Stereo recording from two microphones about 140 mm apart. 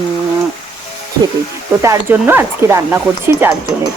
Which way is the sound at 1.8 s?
20° right (ahead or behind).